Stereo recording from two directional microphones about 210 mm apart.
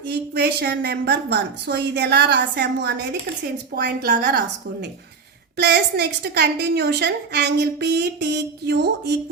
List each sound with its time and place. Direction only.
0.1 s a woman's voice: 50° right (ahead or behind)